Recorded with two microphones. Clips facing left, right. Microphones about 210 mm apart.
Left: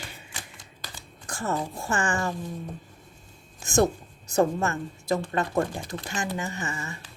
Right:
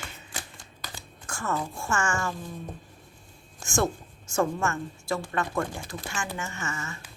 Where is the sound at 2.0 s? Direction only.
35° left (ahead or behind).